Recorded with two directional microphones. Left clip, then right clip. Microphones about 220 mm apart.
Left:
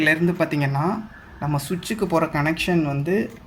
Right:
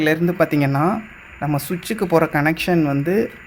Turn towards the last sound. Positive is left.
turn(degrees=-40)  # may be behind; listen again after turning